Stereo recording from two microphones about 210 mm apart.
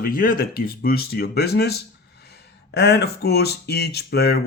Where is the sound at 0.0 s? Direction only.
40° left (ahead or behind).